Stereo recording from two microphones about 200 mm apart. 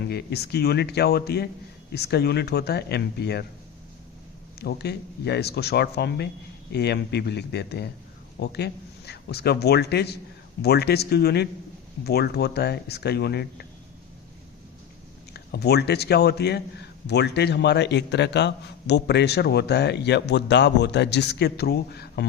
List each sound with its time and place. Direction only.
0.1 s a man's voice: 55° left (ahead or behind)
4.6 s a man's voice: 55° left (ahead or behind)
15.3 s a man's voice: 55° left (ahead or behind)